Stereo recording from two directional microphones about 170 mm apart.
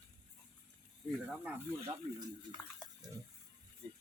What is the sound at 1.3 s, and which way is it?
Speech, 5° right (ahead or behind).